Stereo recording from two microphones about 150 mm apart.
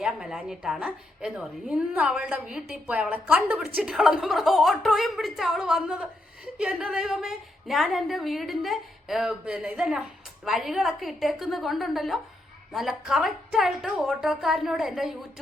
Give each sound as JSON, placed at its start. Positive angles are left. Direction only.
{"t": 0.0, "sound": "a woman's voice", "side_deg": -5}